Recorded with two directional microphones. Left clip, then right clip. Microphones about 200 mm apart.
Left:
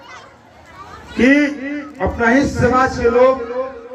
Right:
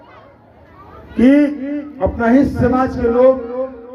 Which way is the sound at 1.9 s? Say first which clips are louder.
Even; 15° left (ahead or behind).